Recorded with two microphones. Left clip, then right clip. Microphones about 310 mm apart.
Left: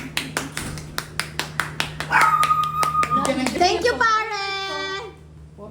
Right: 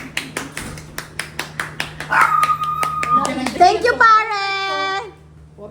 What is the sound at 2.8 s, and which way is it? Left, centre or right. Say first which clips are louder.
Hands: right 2 dB; left.